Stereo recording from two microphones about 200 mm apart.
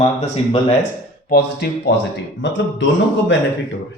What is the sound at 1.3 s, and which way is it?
Speech, 55° left (ahead or behind).